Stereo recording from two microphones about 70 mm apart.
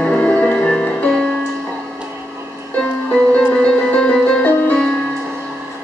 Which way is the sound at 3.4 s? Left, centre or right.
Centre.